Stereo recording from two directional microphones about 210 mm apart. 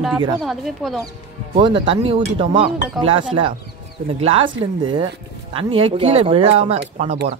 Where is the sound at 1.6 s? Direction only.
25° right (ahead or behind).